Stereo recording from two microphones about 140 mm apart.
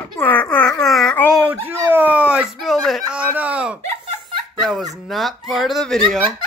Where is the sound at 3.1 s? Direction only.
10° right (ahead or behind).